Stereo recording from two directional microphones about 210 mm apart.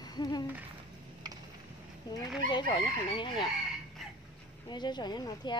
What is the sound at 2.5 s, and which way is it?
Speech, 20° left (ahead or behind).